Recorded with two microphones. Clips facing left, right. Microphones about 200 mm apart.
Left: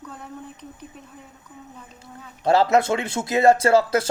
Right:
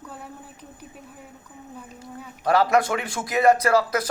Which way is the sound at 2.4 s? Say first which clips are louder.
Left 2 dB; 25° left (ahead or behind).